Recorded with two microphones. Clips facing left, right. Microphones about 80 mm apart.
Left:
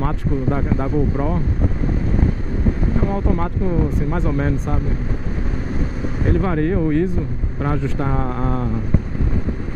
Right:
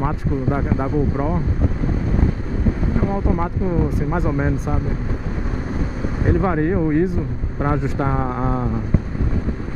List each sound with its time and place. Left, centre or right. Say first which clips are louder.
0.0 s speech: even; centre
3.1 s speech: even; centre
6.2 s speech: right 1 dB; centre